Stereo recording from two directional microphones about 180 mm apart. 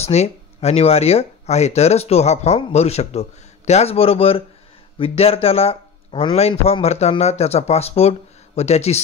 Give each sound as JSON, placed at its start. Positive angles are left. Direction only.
{"t": 0.0, "sound": "speech", "side_deg": 35}